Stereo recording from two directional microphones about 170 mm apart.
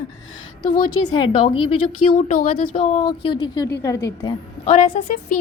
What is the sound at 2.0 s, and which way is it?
A woman's voice, 35° left (ahead or behind).